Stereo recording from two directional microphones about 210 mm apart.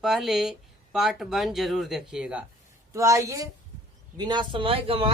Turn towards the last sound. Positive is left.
turn(degrees=-25)  # may be behind; listen again after turning